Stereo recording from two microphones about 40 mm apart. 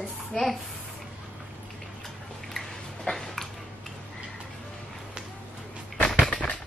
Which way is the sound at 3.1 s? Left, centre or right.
Centre.